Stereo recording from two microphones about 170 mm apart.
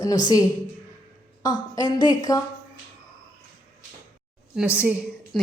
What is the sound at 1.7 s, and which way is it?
Speech, 25° left (ahead or behind).